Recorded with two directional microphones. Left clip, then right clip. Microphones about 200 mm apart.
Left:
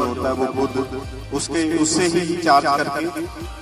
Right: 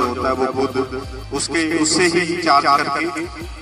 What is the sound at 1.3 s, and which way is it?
A man's voice, 65° left (ahead or behind).